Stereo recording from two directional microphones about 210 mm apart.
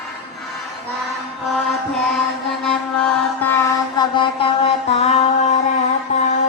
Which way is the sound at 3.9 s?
20° left (ahead or behind).